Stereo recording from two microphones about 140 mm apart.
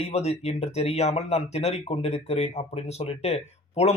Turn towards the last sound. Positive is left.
turn(degrees=50)  # may be behind; listen again after turning